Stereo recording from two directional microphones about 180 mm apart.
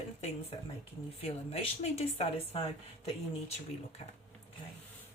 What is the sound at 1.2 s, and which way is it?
Speech, 35° left (ahead or behind).